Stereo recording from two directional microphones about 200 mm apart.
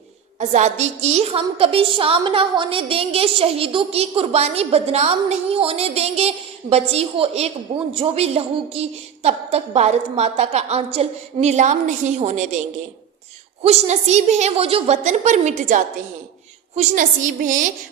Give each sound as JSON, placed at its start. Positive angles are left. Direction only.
{"t": 0.3, "sound": "a woman's voice", "side_deg": -35}
{"t": 13.6, "sound": "a woman's voice", "side_deg": -30}